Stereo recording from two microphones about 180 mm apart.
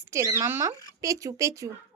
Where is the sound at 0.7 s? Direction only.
20° left (ahead or behind).